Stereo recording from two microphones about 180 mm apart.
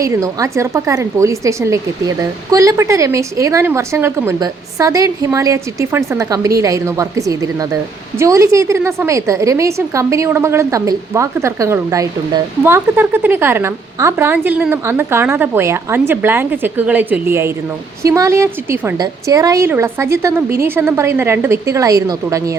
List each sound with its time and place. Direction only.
0.0 s a woman's voice: 20° right (ahead or behind)